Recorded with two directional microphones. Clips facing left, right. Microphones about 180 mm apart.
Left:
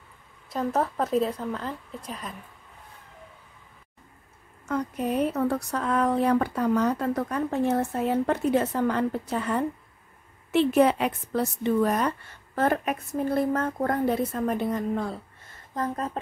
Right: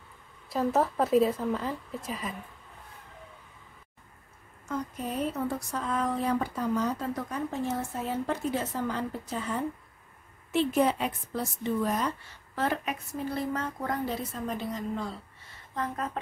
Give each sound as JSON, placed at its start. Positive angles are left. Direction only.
{"t": 0.5, "sound": "a woman's voice", "side_deg": 0}
{"t": 4.6, "sound": "speech", "side_deg": 65}
{"t": 15.7, "sound": "speech", "side_deg": 40}